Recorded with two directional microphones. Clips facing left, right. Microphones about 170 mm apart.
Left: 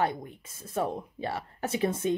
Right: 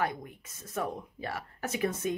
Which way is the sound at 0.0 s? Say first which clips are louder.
Left 3 dB; 30° left (ahead or behind).